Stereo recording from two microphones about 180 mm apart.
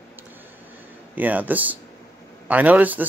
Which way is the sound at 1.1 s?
10° right (ahead or behind).